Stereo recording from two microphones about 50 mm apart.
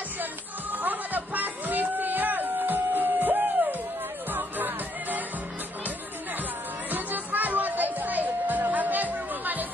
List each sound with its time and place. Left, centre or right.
0.2 s music: right
6.9 s music: right